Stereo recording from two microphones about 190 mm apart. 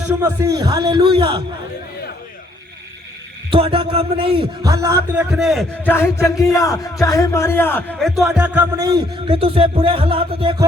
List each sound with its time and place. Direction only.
0.1 s a man's voice: 15° right (ahead or behind)
3.5 s a man's voice: 30° right (ahead or behind)
5.3 s a man's voice: centre (ahead or behind)
5.9 s a man's voice: 15° left (ahead or behind); by 8.6 s 5° right (ahead or behind)
8.7 s a man's voice: 20° right (ahead or behind)
9.2 s a man's voice: 30° right (ahead or behind)